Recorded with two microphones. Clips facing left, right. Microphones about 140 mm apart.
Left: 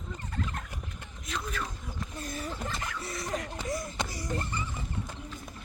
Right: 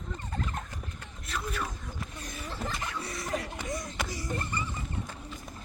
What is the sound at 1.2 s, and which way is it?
Speech, 5° right (ahead or behind).